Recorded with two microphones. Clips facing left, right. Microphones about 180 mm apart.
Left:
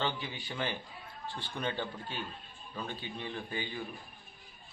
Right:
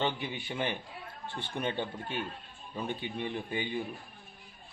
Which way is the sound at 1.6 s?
20° right (ahead or behind).